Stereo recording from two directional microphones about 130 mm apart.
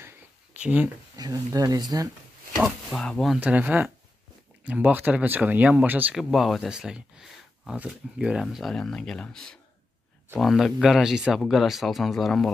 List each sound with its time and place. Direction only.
0.6 s speech: 10° right (ahead or behind)
1.1 s speech: 30° right (ahead or behind)
2.5 s speech: centre (ahead or behind)
3.3 s speech: 10° right (ahead or behind)
6.1 s speech: centre (ahead or behind)